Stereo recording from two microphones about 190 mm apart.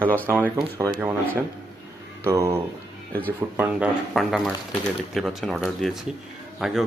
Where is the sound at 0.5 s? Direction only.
15° right (ahead or behind).